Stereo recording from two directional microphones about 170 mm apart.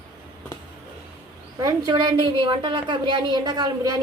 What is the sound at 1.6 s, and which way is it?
A woman's voice, 25° right (ahead or behind).